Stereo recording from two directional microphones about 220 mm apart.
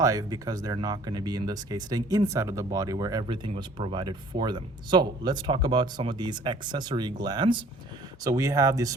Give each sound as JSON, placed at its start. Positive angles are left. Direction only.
{"t": 0.0, "sound": "speech", "side_deg": -15}